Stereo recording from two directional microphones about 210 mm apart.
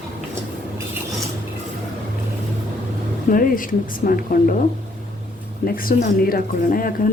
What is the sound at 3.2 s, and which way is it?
A woman's voice, 40° left (ahead or behind).